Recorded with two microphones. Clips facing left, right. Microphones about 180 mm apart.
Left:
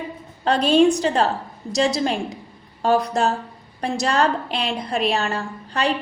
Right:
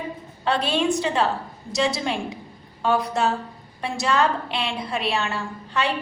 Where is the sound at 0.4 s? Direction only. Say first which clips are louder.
Left 6 dB; 40° left (ahead or behind).